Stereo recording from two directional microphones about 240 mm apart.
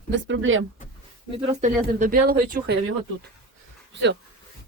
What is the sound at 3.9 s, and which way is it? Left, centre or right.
Speech, right.